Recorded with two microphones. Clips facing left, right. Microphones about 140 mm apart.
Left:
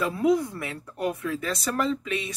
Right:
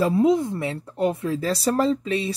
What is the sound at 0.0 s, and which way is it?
Speech, 25° right (ahead or behind).